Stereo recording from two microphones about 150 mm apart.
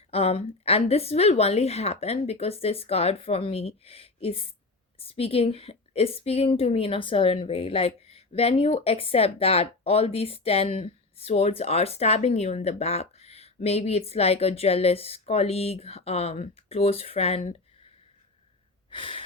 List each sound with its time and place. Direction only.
0.1 s a woman's voice: 40° left (ahead or behind)
18.9 s gasp: 35° left (ahead or behind)